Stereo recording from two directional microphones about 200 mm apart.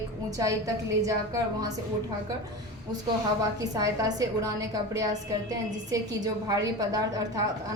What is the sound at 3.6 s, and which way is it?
A woman's voice, 15° right (ahead or behind).